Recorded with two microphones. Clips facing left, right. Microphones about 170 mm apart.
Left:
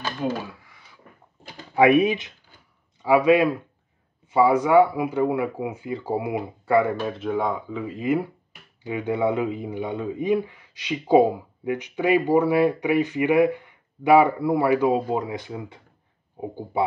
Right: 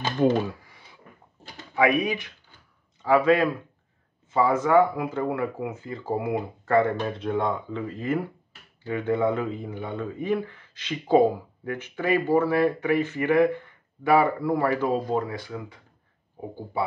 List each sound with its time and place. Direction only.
1.8 s speech: 25° left (ahead or behind)
3.0 s speech: 10° left (ahead or behind)